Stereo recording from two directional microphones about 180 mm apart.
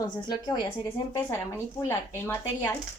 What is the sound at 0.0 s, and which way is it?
Speech, 25° left (ahead or behind).